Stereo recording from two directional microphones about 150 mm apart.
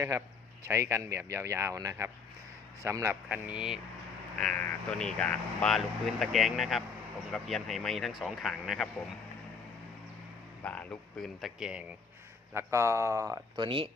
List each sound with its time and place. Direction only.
0.6 s speech: 20° right (ahead or behind)
4.4 s speech: 5° left (ahead or behind)
10.6 s speech: 10° left (ahead or behind)
12.5 s speech: 20° right (ahead or behind)
13.6 s speech: 35° right (ahead or behind)